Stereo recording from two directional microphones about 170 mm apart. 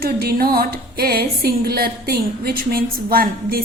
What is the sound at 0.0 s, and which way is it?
Music, 60° right (ahead or behind).